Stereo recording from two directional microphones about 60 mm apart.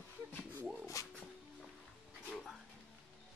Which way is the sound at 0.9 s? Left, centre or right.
Left.